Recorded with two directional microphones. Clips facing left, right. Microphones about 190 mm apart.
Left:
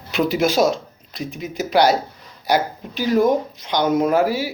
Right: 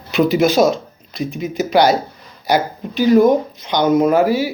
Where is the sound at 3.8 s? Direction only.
5° right (ahead or behind).